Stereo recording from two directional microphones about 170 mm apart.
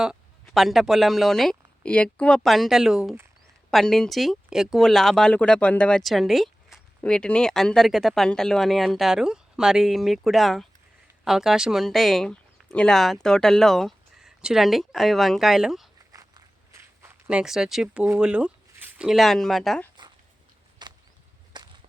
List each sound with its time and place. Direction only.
0.0 s speech: centre (ahead or behind)
16.1 s walk: 20° right (ahead or behind); by 18.0 s 5° right (ahead or behind)
18.0 s speech: 10° right (ahead or behind)
20.8 s a sound: 25° right (ahead or behind)
21.5 s whip: 25° right (ahead or behind)